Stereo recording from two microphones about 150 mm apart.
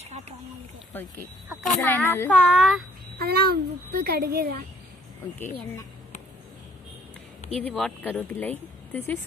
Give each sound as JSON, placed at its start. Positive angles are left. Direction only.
{"t": 1.9, "sound": "speech", "side_deg": 15}
{"t": 3.2, "sound": "a child's voice", "side_deg": -90}
{"t": 5.4, "sound": "speech", "side_deg": 15}
{"t": 7.5, "sound": "speech", "side_deg": 5}